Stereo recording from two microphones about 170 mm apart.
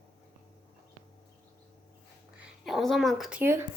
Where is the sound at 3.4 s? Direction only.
15° right (ahead or behind).